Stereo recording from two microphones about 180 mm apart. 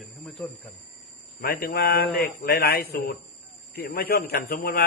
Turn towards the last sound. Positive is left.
turn(degrees=55)  # may be behind; listen again after turning